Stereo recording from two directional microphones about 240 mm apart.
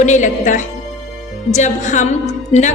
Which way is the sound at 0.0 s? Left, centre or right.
Left.